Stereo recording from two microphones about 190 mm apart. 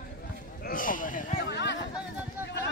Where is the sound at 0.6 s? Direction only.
45° left (ahead or behind).